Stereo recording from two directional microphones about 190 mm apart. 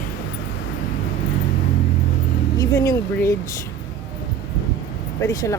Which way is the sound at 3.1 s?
15° left (ahead or behind).